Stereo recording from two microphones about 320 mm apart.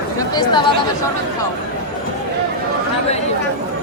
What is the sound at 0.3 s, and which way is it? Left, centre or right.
Speech, centre.